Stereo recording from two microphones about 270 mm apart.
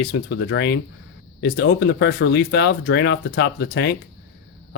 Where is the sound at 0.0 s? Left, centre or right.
Left.